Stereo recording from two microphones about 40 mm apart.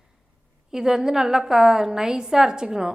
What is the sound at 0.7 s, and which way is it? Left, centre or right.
A woman's voice, centre.